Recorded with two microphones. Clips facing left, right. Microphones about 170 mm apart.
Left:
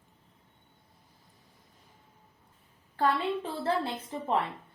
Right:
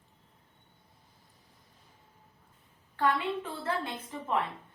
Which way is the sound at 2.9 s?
35° left (ahead or behind).